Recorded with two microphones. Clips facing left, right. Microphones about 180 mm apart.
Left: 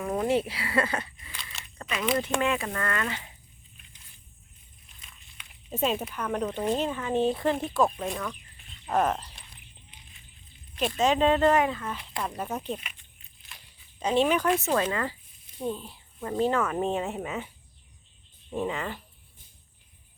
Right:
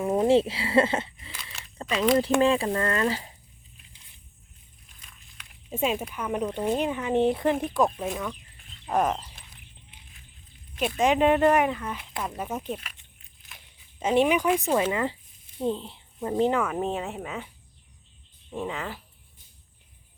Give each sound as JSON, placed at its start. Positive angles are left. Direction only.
{"t": 0.0, "sound": "speech", "side_deg": -25}
{"t": 5.7, "sound": "speech", "side_deg": -10}
{"t": 7.9, "sound": "speech", "side_deg": -5}
{"t": 10.8, "sound": "speech", "side_deg": -10}
{"t": 14.0, "sound": "speech", "side_deg": -15}
{"t": 14.8, "sound": "speech", "side_deg": -25}
{"t": 16.3, "sound": "speech", "side_deg": -15}
{"t": 18.5, "sound": "speech", "side_deg": 0}